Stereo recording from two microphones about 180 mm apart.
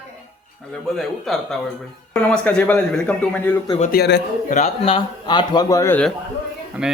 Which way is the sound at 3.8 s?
60° left (ahead or behind).